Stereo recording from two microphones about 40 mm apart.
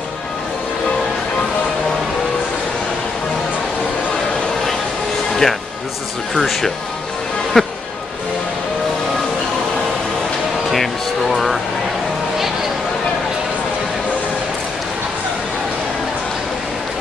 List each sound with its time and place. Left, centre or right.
5.3 s music: centre
6.3 s speech: centre
10.7 s speech: centre